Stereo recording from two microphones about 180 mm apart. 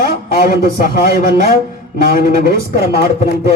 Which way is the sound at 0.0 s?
55° left (ahead or behind).